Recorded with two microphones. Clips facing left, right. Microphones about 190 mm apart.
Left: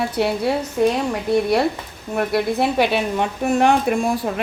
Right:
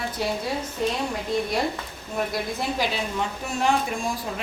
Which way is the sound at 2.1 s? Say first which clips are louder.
Left 8 dB; 65° left (ahead or behind).